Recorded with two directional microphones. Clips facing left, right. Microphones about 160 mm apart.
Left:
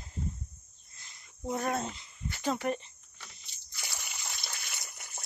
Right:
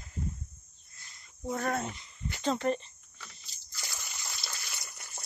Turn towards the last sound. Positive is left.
turn(degrees=15)  # may be behind; listen again after turning